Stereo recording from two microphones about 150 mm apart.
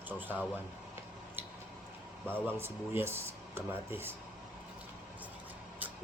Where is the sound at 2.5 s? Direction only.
15° right (ahead or behind).